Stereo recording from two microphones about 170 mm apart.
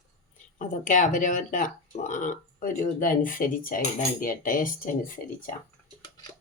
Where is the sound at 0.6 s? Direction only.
50° left (ahead or behind).